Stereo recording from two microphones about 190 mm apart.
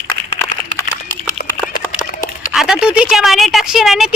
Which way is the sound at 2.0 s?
40° left (ahead or behind).